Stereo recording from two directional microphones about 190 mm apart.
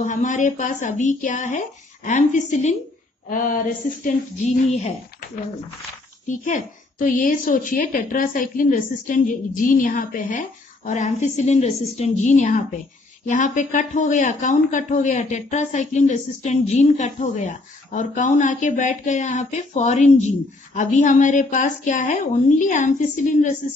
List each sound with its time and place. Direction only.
0.0 s a woman's voice: 40° left (ahead or behind)